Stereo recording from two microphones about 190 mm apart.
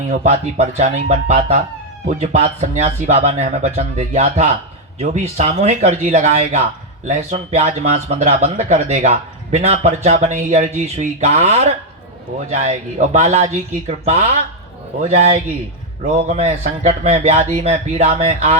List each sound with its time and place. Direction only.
0.1 s speech: 40° right (ahead or behind)
16.1 s speech: 35° right (ahead or behind)